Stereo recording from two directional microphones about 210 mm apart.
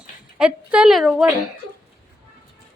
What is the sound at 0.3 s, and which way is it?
Speech, 5° right (ahead or behind).